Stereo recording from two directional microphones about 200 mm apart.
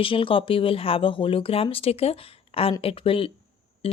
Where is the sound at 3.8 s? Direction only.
30° left (ahead or behind).